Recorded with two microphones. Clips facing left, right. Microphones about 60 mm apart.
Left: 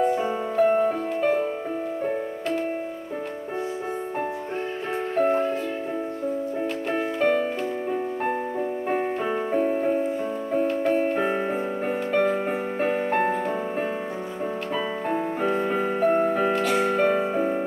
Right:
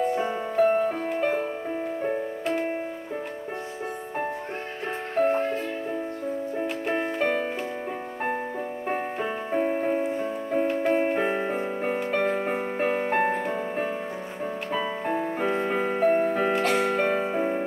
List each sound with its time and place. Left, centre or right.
0.0 s music: centre
5.1 s music: centre
7.2 s music: centre
9.5 s music: centre
10.7 s music: centre
15.0 s music: centre